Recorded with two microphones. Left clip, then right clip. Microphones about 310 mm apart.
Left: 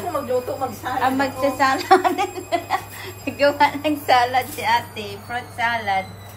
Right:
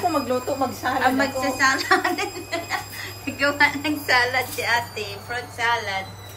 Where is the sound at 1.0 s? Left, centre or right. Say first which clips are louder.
Left 2 dB; centre.